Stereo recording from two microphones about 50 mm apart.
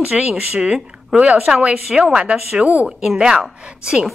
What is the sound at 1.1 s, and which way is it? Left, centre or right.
Speech, right.